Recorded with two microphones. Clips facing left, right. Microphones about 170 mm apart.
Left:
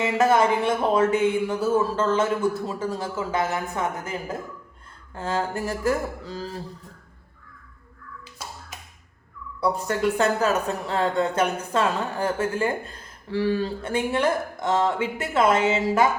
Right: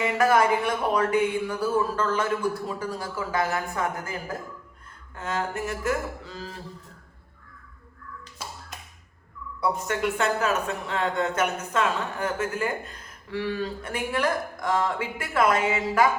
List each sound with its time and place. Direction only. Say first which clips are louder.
0.0 s speech: left 2 dB; 25° left (ahead or behind)
5.1 s speech: left 3 dB; 30° left (ahead or behind)
9.6 s speech: left 2 dB; 35° left (ahead or behind)